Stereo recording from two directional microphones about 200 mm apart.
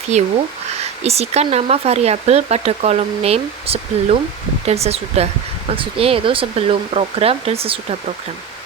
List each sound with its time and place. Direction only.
0.1 s speech: 35° right (ahead or behind)